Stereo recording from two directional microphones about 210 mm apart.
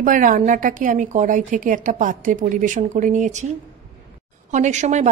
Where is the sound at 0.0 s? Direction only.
40° right (ahead or behind).